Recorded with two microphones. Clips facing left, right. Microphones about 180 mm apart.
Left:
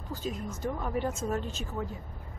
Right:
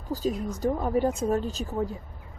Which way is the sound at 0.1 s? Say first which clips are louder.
Right 7 dB; 35° right (ahead or behind).